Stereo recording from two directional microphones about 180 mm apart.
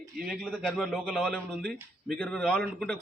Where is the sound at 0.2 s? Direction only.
Centre (ahead or behind).